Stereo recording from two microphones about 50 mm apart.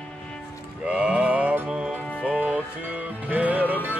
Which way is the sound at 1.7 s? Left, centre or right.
Centre.